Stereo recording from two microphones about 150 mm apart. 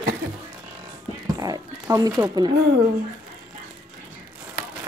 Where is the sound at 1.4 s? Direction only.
20° right (ahead or behind).